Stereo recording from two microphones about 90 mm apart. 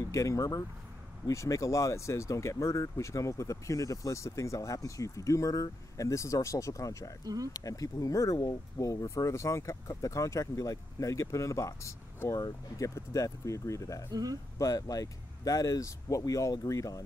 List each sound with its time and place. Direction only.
0.1 s speech: 35° left (ahead or behind)
14.1 s speech: 45° right (ahead or behind)
14.6 s speech: 40° left (ahead or behind)